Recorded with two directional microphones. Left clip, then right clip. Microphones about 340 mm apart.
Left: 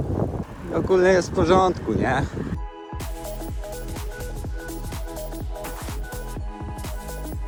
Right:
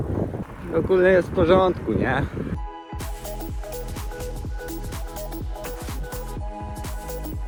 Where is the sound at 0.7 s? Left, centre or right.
Centre.